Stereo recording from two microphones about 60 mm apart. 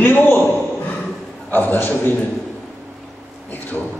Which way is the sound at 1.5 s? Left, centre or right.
Left.